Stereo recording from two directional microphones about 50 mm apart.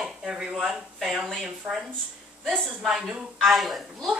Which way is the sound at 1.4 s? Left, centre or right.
Centre.